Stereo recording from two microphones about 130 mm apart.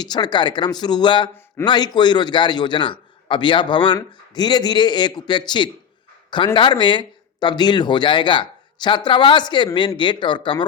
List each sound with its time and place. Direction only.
0.0 s speech: 35° left (ahead or behind)